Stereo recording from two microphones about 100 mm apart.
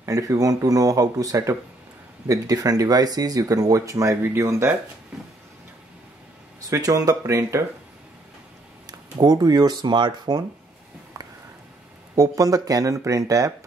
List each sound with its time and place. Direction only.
0.0 s speech: 35° right (ahead or behind)
6.6 s speech: 35° right (ahead or behind)
8.8 s speech: 40° right (ahead or behind)
12.2 s speech: 35° right (ahead or behind)